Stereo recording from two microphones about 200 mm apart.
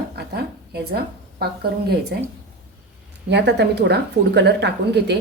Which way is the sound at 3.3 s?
60° right (ahead or behind).